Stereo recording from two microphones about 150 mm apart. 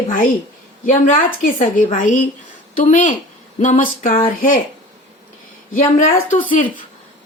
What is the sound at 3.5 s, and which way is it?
Speech, 55° left (ahead or behind).